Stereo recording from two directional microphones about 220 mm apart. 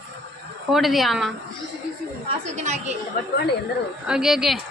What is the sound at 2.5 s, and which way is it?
Speech, 30° right (ahead or behind).